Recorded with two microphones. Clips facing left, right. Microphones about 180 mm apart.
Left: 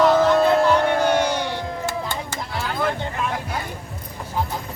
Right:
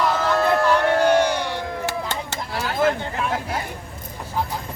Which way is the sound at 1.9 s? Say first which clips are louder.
Even; 75° right (ahead or behind).